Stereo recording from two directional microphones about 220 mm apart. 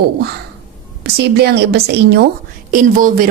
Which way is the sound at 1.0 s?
50° right (ahead or behind).